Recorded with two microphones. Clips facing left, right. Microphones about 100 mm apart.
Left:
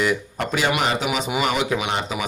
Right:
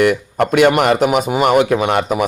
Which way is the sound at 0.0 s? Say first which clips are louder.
Right 8 dB; 60° right (ahead or behind).